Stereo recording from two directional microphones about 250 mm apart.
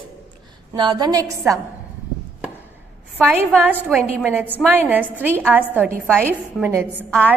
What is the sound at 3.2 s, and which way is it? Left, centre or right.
A woman's voice, centre.